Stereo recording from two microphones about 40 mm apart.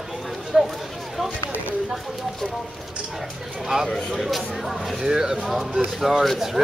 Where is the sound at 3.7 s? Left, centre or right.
Centre.